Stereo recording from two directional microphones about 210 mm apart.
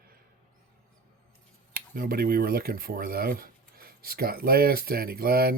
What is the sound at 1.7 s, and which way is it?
Speech, 45° right (ahead or behind).